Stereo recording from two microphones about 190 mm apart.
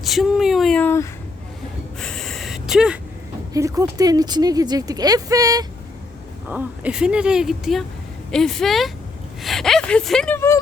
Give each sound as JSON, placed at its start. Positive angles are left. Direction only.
{"t": 0.0, "sound": "a sound", "side_deg": 0}
{"t": 3.5, "sound": "speech", "side_deg": -20}
{"t": 6.5, "sound": "speech", "side_deg": -10}